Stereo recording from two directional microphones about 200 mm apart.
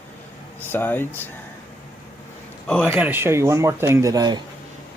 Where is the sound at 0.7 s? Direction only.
10° left (ahead or behind).